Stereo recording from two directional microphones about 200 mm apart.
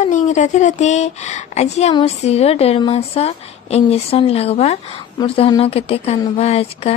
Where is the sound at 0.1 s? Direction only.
40° left (ahead or behind).